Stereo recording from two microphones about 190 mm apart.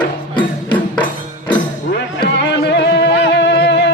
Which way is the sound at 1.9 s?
60° left (ahead or behind).